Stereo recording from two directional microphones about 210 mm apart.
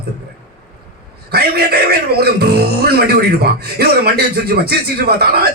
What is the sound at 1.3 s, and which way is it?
Speech, 50° right (ahead or behind).